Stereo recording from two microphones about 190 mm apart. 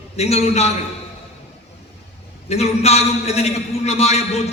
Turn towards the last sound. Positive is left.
turn(degrees=35)  # may be behind; listen again after turning